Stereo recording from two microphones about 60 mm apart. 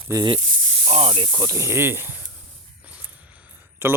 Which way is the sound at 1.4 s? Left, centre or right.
Right.